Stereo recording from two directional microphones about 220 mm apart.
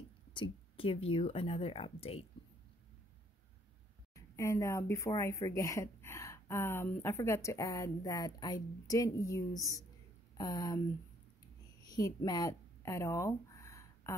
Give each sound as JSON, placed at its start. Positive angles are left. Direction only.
{"t": 0.3, "sound": "speech", "side_deg": 25}
{"t": 4.1, "sound": "speech", "side_deg": 15}
{"t": 11.8, "sound": "a sound", "side_deg": 15}